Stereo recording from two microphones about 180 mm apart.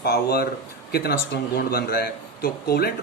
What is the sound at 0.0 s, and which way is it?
Speech, 60° left (ahead or behind).